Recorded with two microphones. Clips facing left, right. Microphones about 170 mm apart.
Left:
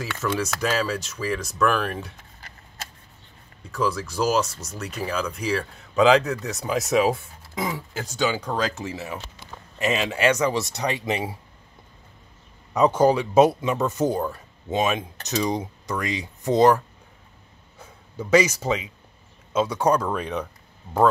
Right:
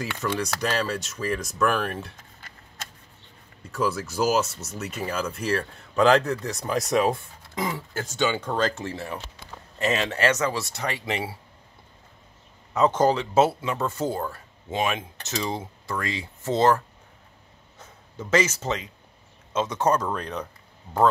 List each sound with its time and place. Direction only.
0.2 s speech: 5° left (ahead or behind)
3.7 s speech: 5° right (ahead or behind); by 11.3 s 20° left (ahead or behind)
12.7 s speech: 10° left (ahead or behind)